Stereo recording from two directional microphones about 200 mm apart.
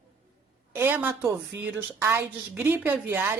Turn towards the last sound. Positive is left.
turn(degrees=-10)  # may be behind; listen again after turning